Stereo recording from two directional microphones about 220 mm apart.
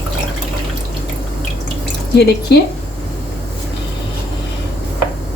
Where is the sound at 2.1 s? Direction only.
45° left (ahead or behind).